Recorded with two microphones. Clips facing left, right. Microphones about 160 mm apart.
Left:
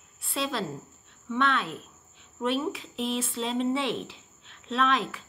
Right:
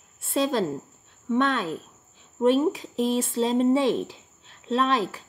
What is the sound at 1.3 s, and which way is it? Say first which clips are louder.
A woman's voice: right 4 dB; 40° right (ahead or behind).